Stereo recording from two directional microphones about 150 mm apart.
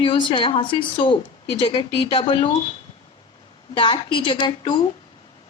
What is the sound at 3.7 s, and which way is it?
A woman's voice, 35° left (ahead or behind).